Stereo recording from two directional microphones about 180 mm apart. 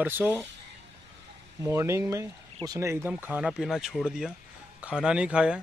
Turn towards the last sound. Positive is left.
turn(degrees=-5)  # may be behind; listen again after turning